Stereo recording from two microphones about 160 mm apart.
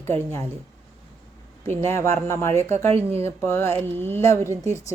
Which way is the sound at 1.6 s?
15° left (ahead or behind).